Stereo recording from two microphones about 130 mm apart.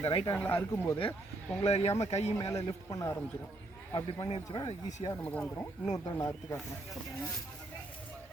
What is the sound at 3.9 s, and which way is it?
Speech, 35° left (ahead or behind).